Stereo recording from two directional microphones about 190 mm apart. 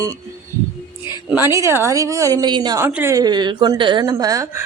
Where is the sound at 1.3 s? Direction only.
15° right (ahead or behind).